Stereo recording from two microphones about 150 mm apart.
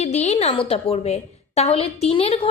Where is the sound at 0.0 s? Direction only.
45° left (ahead or behind).